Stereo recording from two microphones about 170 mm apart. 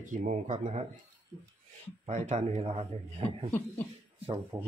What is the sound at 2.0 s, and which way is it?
Speech, 45° right (ahead or behind).